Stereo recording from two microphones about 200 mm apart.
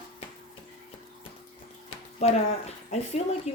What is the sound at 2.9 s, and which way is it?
Speech, 35° left (ahead or behind).